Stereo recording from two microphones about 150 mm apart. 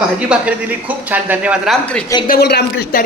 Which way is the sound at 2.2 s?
85° left.